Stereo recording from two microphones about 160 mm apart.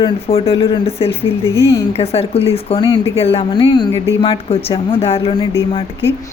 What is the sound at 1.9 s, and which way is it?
Speech, 40° left (ahead or behind).